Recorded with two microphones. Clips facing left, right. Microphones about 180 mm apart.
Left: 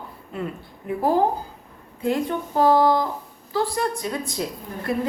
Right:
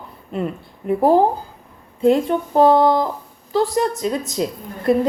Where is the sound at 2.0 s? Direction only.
25° right (ahead or behind).